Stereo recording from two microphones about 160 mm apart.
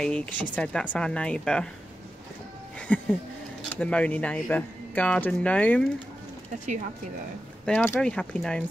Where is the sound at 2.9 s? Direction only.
10° left (ahead or behind).